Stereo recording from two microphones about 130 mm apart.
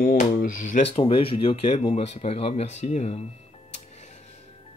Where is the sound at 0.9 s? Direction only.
45° left (ahead or behind).